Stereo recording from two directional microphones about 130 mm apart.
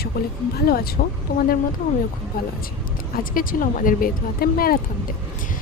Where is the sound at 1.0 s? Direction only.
90° left.